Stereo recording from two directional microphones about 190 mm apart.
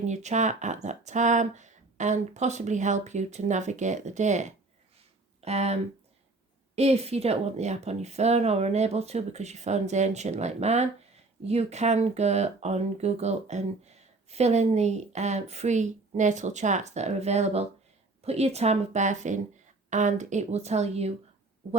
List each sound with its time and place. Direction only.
0.0 s speech: 35° right (ahead or behind)